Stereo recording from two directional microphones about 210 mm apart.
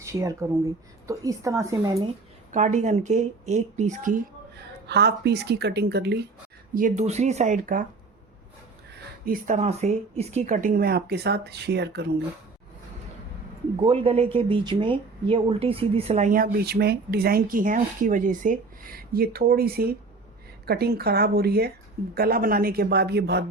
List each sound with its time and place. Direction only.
0.0 s speech: 15° right (ahead or behind)
2.5 s speech: 35° right (ahead or behind); by 6.1 s 50° right (ahead or behind)
6.7 s speech: 35° right (ahead or behind)
9.2 s speech: 40° right (ahead or behind)
13.8 s speech: 30° right (ahead or behind); by 23.5 s 55° right (ahead or behind)